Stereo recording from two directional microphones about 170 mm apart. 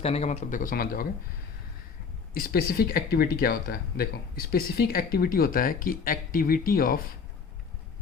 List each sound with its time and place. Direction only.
0.0 s a man's voice: 40° left (ahead or behind); by 1.0 s 60° left (ahead or behind)
2.3 s speech: 60° left (ahead or behind)